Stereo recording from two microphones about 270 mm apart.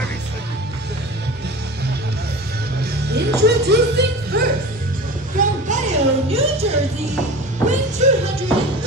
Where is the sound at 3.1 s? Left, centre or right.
Right.